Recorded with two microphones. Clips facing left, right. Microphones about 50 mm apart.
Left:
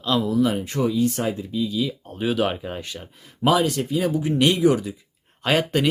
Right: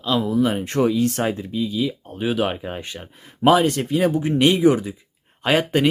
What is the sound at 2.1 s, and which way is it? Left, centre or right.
Speech, centre.